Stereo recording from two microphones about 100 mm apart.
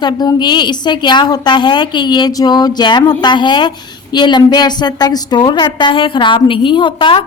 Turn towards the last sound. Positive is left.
turn(degrees=55)  # may be behind; listen again after turning